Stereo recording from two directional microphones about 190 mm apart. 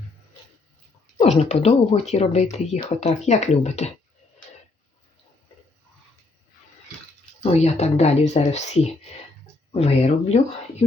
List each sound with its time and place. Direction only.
1.2 s speech: 35° left (ahead or behind)
7.4 s speech: 35° left (ahead or behind)